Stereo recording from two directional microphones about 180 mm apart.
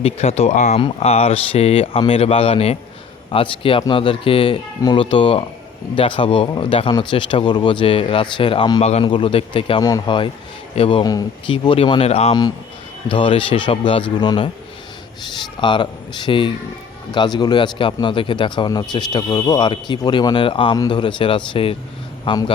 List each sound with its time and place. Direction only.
0.0 s speech: 35° left (ahead or behind)